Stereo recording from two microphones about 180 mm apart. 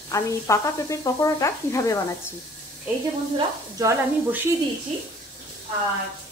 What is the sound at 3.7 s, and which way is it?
Speech, 15° right (ahead or behind).